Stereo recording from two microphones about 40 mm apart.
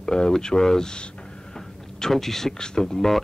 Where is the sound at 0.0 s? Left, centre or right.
Centre.